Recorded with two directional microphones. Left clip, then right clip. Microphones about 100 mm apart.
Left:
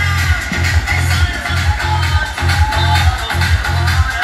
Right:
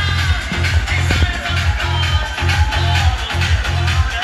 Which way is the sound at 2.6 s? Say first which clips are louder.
Left 4 dB; 35° left (ahead or behind).